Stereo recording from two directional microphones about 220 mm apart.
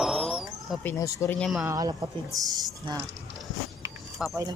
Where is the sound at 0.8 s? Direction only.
10° left (ahead or behind).